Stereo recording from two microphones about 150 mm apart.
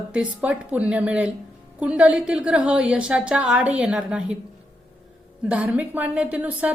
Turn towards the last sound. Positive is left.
turn(degrees=-10)  # may be behind; listen again after turning